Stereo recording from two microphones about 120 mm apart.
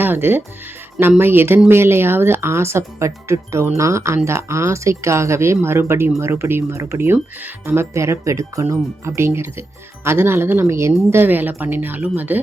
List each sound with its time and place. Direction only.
0.0 s a woman's voice: 15° right (ahead or behind)